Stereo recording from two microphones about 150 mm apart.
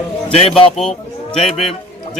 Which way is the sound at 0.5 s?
5° left (ahead or behind).